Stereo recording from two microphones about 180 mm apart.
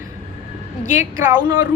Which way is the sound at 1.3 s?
20° right (ahead or behind).